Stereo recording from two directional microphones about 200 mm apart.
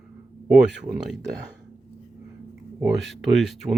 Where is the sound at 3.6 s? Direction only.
20° right (ahead or behind).